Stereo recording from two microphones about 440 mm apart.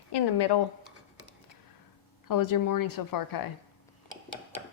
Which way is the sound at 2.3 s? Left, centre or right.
Left.